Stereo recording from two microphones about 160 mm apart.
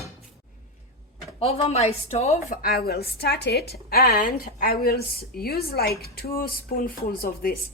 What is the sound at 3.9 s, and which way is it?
A woman's voice, 70° left (ahead or behind).